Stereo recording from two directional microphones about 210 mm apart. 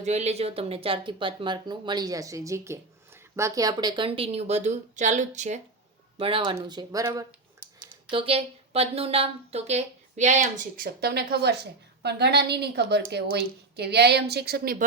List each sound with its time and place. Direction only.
0.0 s speech: 30° right (ahead or behind); by 7.3 s 15° right (ahead or behind)
8.1 s speech: 25° right (ahead or behind)
10.8 s a woman's voice: 50° right (ahead or behind)